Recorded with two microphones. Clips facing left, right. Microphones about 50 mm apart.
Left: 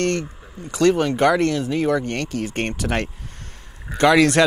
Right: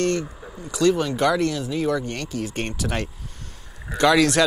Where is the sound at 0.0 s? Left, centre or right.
Left.